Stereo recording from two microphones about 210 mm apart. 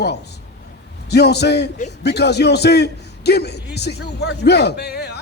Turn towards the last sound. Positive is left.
turn(degrees=50)  # may be behind; listen again after turning